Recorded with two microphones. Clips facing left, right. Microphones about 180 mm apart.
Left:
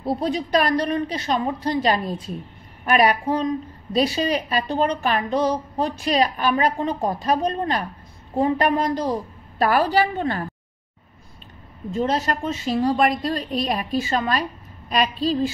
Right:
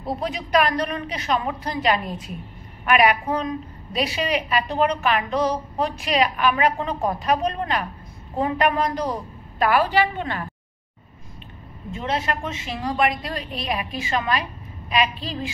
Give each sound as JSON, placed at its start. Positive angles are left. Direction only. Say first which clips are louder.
{"t": 0.0, "sound": "a woman's voice", "louder": "left 4 dB", "side_deg": 30}
{"t": 11.9, "sound": "a woman's voice", "louder": "left 3 dB", "side_deg": 35}